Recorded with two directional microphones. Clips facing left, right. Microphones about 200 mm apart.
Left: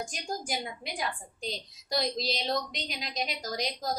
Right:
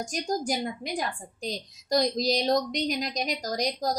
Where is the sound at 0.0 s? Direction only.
45° right (ahead or behind).